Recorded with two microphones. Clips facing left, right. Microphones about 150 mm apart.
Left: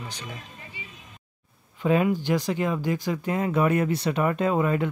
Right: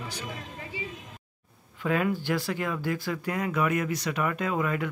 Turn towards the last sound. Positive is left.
turn(degrees=30)  # may be behind; listen again after turning